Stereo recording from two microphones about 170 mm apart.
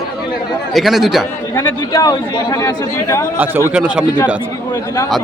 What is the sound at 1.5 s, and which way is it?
A man's voice, 20° left (ahead or behind).